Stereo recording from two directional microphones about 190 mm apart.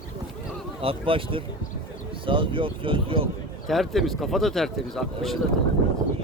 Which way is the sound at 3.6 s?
Centre (ahead or behind).